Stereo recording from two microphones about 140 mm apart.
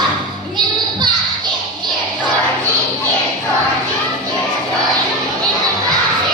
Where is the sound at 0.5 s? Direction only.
30° right (ahead or behind).